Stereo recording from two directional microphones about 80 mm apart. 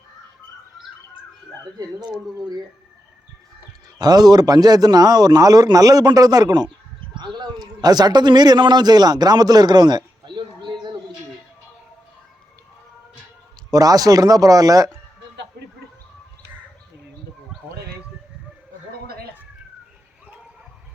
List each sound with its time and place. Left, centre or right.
3.9 s a man's voice: right
7.2 s a sound: right
13.7 s speech: right